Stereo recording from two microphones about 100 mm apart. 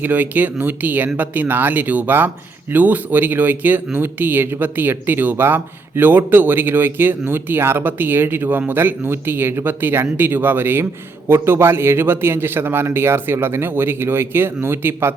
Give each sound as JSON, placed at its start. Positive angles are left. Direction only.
{"t": 0.0, "sound": "speech", "side_deg": -15}